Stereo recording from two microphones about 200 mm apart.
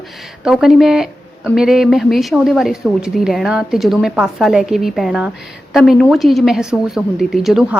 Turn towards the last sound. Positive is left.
turn(degrees=0)  # may be behind; listen again after turning